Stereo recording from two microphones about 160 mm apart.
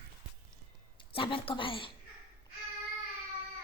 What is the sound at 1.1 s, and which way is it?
Speech, 35° left (ahead or behind).